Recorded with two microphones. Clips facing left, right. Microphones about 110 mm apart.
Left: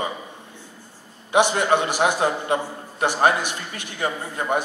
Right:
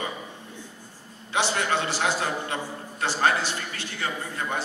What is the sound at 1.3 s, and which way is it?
A man's voice, 15° left (ahead or behind).